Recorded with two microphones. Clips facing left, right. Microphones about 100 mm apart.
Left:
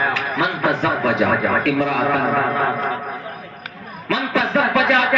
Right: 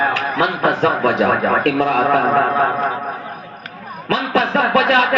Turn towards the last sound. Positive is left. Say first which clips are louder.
# right 2 dB
turn(degrees=-45)  # may be behind; listen again after turning